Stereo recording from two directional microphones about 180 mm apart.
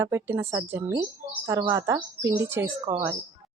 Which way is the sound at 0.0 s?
15° right (ahead or behind).